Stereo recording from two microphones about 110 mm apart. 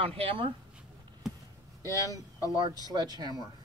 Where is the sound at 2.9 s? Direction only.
40° right (ahead or behind).